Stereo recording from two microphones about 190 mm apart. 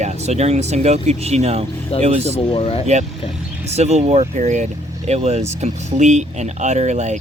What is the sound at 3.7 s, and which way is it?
Speech, 35° right (ahead or behind).